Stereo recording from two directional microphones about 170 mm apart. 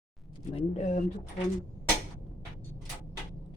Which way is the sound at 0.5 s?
40° left (ahead or behind).